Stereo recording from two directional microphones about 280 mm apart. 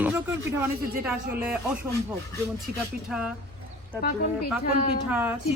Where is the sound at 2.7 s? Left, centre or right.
Right.